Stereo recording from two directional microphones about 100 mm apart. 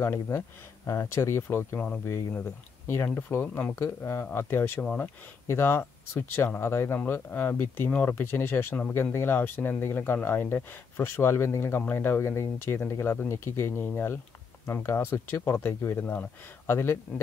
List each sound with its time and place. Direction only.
0.0 s speech: 25° left (ahead or behind)
3.2 s speech: 20° left (ahead or behind)
4.8 s speech: 15° left (ahead or behind)
5.5 s speech: 25° left (ahead or behind)